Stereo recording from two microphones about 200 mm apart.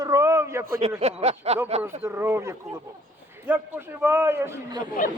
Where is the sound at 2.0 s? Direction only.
10° right (ahead or behind).